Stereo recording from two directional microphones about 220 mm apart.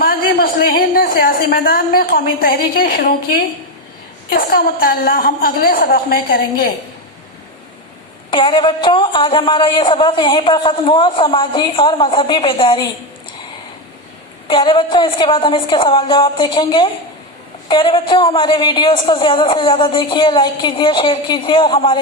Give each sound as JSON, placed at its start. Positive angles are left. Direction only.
{"t": 0.0, "sound": "a woman's voice", "side_deg": 40}
{"t": 8.3, "sound": "speech", "side_deg": 20}
{"t": 14.4, "sound": "speech", "side_deg": 20}